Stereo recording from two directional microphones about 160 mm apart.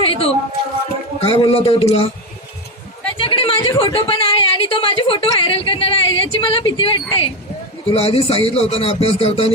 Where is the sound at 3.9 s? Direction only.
35° left (ahead or behind).